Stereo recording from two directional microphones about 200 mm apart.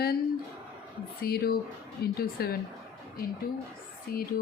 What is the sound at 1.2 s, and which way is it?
Speech, 50° left (ahead or behind).